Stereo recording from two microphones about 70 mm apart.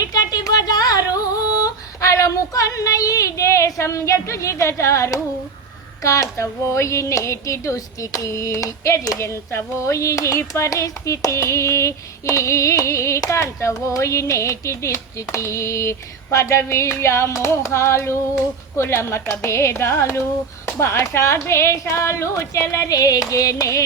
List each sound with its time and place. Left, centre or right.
0.0 s music: left
6.0 s a woman's voice: left
22.9 s music: left